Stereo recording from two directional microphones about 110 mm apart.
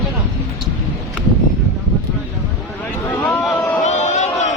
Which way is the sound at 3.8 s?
90° left.